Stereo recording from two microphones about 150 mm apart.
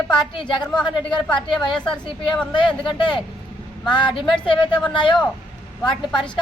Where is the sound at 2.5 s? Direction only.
30° left (ahead or behind).